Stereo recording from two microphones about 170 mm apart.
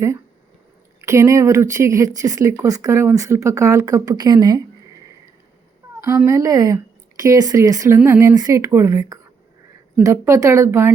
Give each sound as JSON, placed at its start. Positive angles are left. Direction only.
{"t": 1.0, "sound": "speech", "side_deg": -20}
{"t": 6.0, "sound": "speech", "side_deg": -15}